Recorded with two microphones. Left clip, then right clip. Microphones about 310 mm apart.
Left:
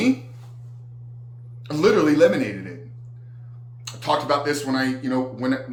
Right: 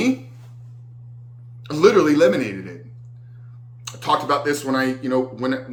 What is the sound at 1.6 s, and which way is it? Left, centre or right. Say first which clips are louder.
Speech: right 3 dB; centre.